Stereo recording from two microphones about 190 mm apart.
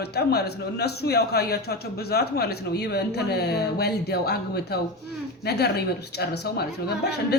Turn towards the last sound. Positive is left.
turn(degrees=60)  # may be behind; listen again after turning